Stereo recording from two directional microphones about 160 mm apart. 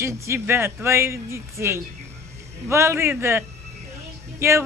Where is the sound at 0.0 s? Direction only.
15° right (ahead or behind).